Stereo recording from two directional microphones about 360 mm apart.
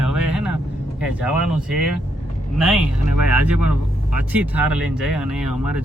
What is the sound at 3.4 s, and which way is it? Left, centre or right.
Speech, right.